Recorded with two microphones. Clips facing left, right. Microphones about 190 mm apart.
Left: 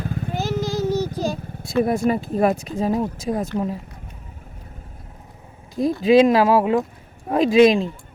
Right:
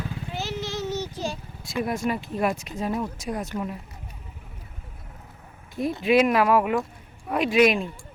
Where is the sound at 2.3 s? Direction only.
35° left (ahead or behind).